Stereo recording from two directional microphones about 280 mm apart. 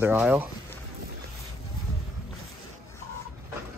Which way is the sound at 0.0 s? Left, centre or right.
Centre.